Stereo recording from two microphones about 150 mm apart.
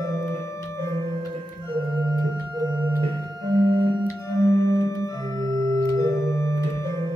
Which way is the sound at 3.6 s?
35° right (ahead or behind).